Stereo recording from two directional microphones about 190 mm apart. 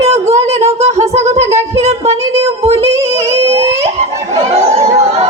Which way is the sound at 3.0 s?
35° right (ahead or behind).